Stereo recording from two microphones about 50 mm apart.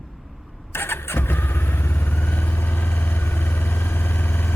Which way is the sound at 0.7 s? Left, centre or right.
Left.